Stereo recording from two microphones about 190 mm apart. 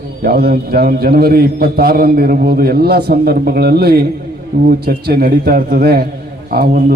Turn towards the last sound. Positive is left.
turn(degrees=-55)  # may be behind; listen again after turning